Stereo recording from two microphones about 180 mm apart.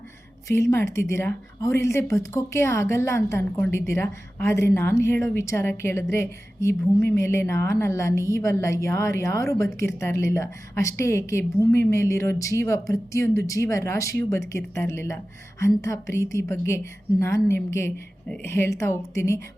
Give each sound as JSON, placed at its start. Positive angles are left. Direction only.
{"t": 0.4, "sound": "a woman's voice", "side_deg": 15}